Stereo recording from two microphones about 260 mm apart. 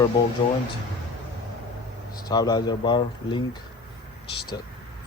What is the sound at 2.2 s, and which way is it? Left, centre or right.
Speech, centre.